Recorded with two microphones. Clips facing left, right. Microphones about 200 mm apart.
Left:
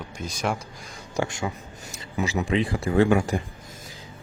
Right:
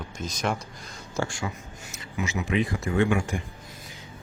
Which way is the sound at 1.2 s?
20° left (ahead or behind).